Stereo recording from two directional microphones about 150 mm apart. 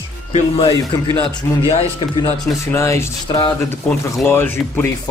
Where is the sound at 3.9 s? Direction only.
5° left (ahead or behind).